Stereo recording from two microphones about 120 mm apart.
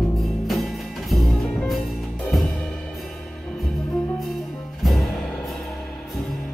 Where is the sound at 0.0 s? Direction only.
Centre (ahead or behind).